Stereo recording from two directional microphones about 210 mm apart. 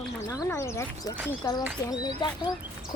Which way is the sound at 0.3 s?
15° left (ahead or behind).